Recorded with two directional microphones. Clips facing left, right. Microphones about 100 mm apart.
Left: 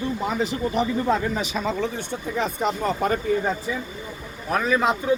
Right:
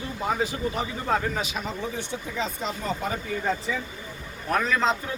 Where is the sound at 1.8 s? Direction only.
55° left (ahead or behind).